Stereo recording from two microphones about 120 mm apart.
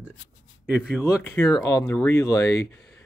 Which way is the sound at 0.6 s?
10° right (ahead or behind).